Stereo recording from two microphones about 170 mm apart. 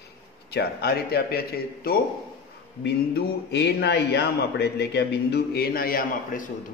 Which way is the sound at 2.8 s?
75° left (ahead or behind).